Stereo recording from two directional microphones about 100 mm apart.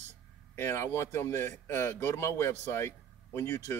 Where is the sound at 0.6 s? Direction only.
25° left (ahead or behind).